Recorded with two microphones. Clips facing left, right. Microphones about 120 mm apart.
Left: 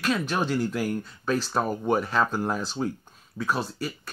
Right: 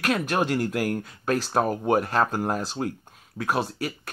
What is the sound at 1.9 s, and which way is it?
Speech, 50° right (ahead or behind).